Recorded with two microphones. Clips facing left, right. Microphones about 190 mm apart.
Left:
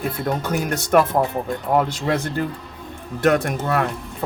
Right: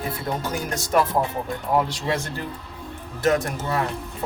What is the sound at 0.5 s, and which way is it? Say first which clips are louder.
Speech: left 5 dB; 65° left (ahead or behind).